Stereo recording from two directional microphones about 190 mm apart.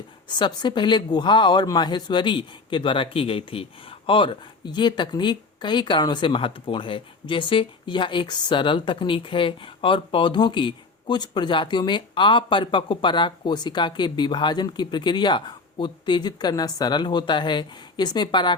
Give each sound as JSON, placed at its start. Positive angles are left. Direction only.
{"t": 0.3, "sound": "a woman's voice", "side_deg": 25}